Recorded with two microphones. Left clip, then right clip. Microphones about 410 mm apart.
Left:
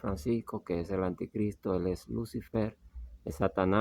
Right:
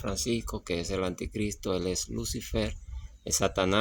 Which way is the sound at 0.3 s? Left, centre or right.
Left.